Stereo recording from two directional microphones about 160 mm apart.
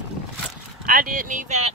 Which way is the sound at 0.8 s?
60° right (ahead or behind).